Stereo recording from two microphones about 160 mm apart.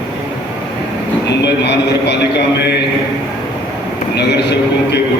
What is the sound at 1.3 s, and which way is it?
Speech, 90° left.